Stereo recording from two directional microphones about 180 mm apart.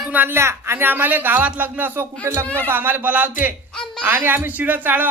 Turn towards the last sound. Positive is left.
turn(degrees=-10)  # may be behind; listen again after turning